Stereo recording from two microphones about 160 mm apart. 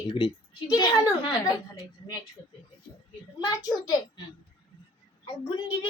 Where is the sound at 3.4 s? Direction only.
25° left (ahead or behind).